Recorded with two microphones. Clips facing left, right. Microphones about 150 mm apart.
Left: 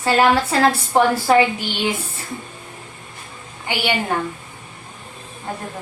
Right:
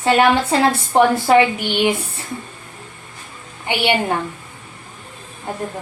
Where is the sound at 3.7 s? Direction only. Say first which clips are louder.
Right 3 dB; 20° right (ahead or behind).